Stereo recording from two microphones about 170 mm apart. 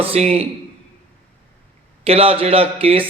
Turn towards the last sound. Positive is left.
turn(degrees=-35)  # may be behind; listen again after turning